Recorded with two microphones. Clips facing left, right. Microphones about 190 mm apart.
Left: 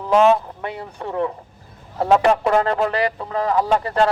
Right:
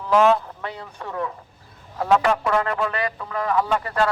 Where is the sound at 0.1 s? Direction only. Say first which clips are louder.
Left 2 dB; 20° left (ahead or behind).